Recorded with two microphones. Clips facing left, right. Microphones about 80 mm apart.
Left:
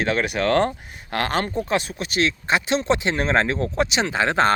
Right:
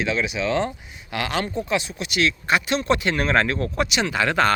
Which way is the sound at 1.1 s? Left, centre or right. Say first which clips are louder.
Left 2 dB; left.